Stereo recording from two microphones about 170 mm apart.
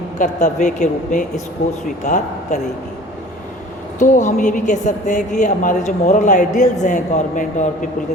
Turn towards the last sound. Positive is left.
turn(degrees=45)  # may be behind; listen again after turning